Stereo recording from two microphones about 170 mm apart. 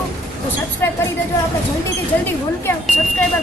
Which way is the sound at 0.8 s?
15° left (ahead or behind).